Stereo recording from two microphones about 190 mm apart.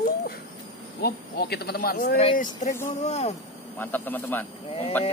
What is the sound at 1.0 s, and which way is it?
Speech, 55° left (ahead or behind).